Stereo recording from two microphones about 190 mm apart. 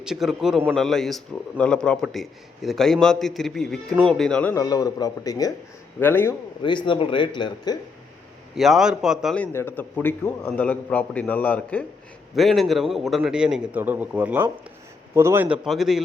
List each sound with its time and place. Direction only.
0.0 s a man's voice: centre (ahead or behind)
4.5 s a man's voice: 20° left (ahead or behind)
6.6 s speech: 25° left (ahead or behind)
8.5 s a man's voice: centre (ahead or behind)